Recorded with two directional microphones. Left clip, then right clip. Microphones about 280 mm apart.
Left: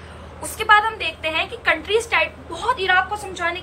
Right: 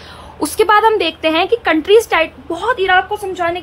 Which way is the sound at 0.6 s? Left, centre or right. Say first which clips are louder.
Right 5 dB; right.